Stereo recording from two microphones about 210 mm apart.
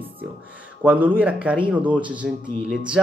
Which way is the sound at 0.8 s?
10° right (ahead or behind).